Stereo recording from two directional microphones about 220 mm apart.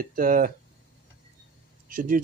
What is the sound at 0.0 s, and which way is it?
Speech, 40° right (ahead or behind).